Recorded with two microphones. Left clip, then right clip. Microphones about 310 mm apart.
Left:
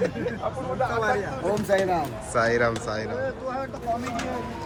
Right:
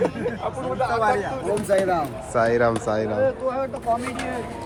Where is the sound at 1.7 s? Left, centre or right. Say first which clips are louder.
Right 3 dB; centre.